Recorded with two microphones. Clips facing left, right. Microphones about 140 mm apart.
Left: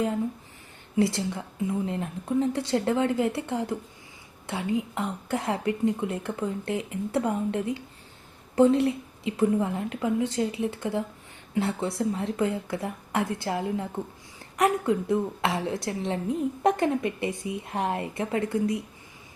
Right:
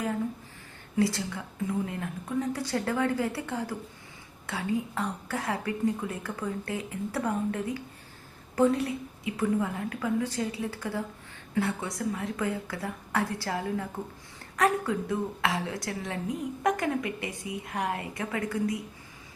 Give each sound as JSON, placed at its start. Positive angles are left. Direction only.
{"t": 0.9, "sound": "speech", "side_deg": 25}